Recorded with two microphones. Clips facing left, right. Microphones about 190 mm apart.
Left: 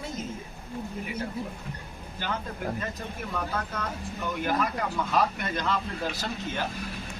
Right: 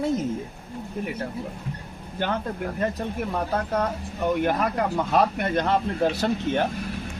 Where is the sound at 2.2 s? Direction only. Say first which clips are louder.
Right 7 dB; 60° right (ahead or behind).